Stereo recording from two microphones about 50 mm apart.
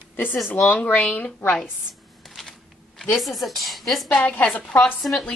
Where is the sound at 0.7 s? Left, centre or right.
Left.